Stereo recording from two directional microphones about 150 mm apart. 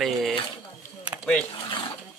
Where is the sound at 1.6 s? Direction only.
35° left (ahead or behind).